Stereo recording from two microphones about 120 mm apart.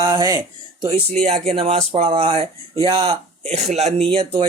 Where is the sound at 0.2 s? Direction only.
30° right (ahead or behind).